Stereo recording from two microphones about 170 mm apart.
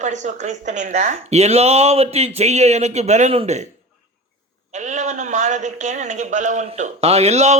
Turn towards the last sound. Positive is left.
turn(degrees=-40)  # may be behind; listen again after turning